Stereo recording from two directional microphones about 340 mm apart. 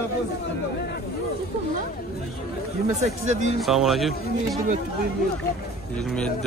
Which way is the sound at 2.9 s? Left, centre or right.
Centre.